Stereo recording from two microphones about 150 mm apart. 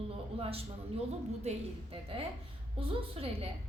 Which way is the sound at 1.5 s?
40° right (ahead or behind).